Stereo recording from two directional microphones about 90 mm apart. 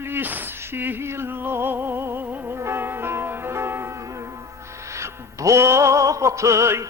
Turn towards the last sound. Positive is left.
turn(degrees=-35)  # may be behind; listen again after turning